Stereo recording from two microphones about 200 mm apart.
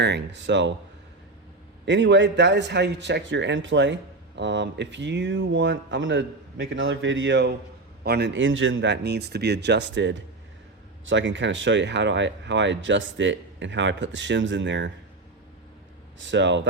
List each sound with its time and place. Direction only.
0.0 s a man's voice: 60° right (ahead or behind)
1.8 s a man's voice: 60° right (ahead or behind)
16.1 s a man's voice: 65° right (ahead or behind)